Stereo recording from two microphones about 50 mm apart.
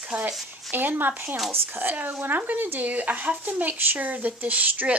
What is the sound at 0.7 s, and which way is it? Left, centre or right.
Speech, right.